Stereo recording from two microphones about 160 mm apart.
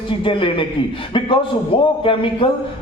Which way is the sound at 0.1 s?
30° left (ahead or behind).